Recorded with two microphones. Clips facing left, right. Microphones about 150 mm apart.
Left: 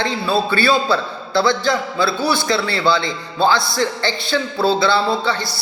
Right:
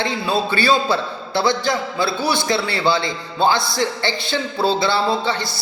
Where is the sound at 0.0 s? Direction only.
20° right (ahead or behind).